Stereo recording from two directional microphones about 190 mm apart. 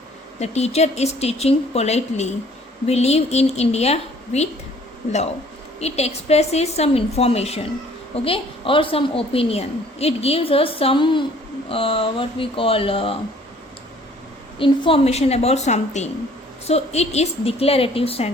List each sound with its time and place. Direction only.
0.3 s speech: 35° left (ahead or behind)
5.8 s a woman's voice: 35° left (ahead or behind)
14.6 s speech: 30° left (ahead or behind)